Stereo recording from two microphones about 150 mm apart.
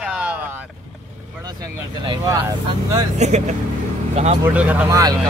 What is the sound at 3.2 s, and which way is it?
Speech, 50° right (ahead or behind).